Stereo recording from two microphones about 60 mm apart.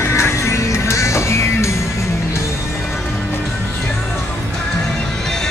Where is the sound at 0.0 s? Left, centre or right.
Left.